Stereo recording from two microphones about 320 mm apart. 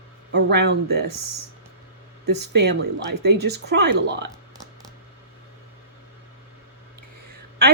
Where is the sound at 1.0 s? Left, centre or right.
Right.